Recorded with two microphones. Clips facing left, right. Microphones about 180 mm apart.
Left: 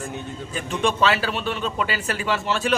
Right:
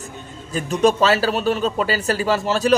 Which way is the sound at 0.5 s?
40° right (ahead or behind).